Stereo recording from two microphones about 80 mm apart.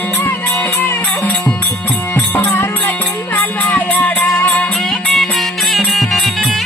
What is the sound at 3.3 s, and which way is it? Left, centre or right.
Music, left.